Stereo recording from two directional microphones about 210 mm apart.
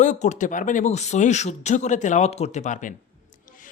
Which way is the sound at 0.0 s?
35° left (ahead or behind).